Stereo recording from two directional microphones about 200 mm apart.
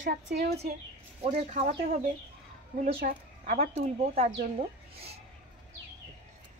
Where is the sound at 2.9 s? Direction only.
45° right (ahead or behind).